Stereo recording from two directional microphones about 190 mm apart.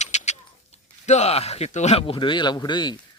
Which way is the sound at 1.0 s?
35° left (ahead or behind).